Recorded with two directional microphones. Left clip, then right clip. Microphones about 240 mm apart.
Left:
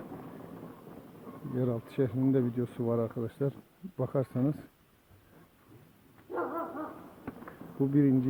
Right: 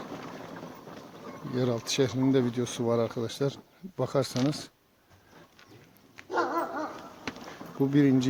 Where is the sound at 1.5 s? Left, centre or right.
Centre.